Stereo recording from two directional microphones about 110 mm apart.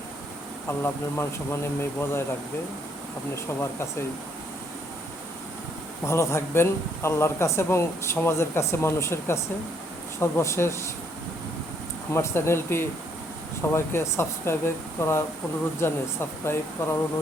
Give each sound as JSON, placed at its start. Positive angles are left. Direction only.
{"t": 0.7, "sound": "speech", "side_deg": 25}
{"t": 3.3, "sound": "speech", "side_deg": 25}
{"t": 6.1, "sound": "speech", "side_deg": 25}
{"t": 12.1, "sound": "speech", "side_deg": 25}